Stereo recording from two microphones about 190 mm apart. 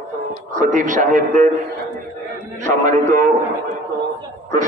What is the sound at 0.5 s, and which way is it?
Speech, 40° right (ahead or behind).